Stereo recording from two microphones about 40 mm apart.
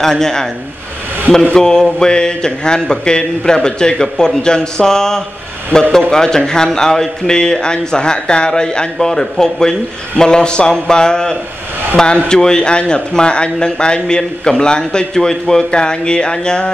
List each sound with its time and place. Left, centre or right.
0.0 s a man's voice: centre
1.5 s a man's voice: centre